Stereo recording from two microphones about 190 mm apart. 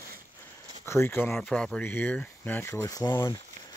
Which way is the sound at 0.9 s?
10° left (ahead or behind).